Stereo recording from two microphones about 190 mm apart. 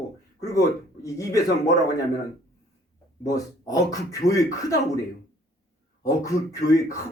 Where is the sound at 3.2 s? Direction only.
20° left (ahead or behind).